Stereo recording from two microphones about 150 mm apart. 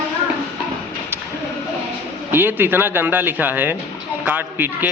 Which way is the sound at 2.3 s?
15° right (ahead or behind).